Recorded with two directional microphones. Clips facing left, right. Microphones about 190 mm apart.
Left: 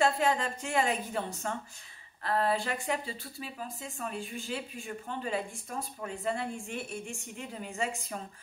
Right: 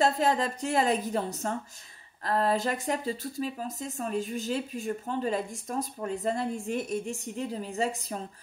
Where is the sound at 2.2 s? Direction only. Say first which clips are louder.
Right 3 dB; 40° right (ahead or behind).